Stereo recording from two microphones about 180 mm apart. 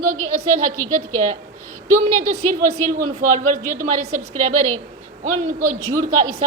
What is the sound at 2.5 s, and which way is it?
A woman's voice, 50° right (ahead or behind).